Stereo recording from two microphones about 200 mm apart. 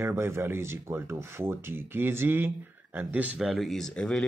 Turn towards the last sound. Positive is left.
turn(degrees=5)  # may be behind; listen again after turning